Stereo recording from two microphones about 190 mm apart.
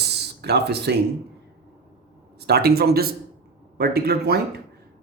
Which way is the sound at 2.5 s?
55° right (ahead or behind).